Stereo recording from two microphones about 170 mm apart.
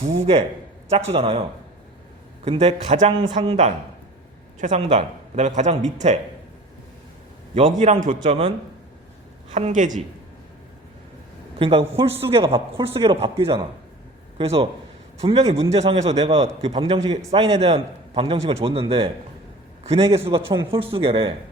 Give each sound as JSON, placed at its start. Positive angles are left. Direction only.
{"t": 0.0, "sound": "a man's voice", "side_deg": -35}
{"t": 3.2, "sound": "a woman's voice", "side_deg": -30}
{"t": 4.6, "sound": "speech", "side_deg": -35}
{"t": 7.5, "sound": "a man's voice", "side_deg": -35}
{"t": 8.2, "sound": "a man's voice", "side_deg": -35}
{"t": 9.6, "sound": "speech", "side_deg": -45}
{"t": 11.6, "sound": "a man's voice", "side_deg": -30}